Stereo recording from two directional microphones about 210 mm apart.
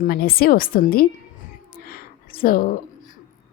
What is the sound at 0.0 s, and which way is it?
A woman's voice, 45° left (ahead or behind).